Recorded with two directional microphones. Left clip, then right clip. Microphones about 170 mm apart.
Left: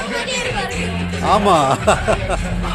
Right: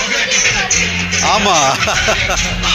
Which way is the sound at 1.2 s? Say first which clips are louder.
Right 1 dB; 10° left (ahead or behind).